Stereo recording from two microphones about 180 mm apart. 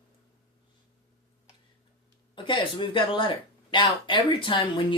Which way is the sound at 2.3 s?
25° left (ahead or behind).